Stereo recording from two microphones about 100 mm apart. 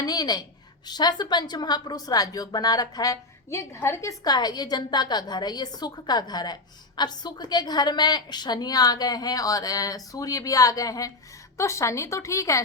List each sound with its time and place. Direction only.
0.0 s a sound: 40° left (ahead or behind)
0.9 s speech: 45° left (ahead or behind); by 4.1 s 25° left (ahead or behind)
4.2 s a woman's voice: 45° left (ahead or behind)